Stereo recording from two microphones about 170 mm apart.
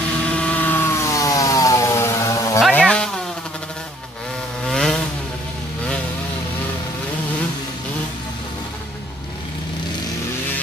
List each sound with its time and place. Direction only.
0.3 s vehicle: 10° left (ahead or behind)
2.7 s a sound: 5° left (ahead or behind)
4.6 s vehicle: centre (ahead or behind)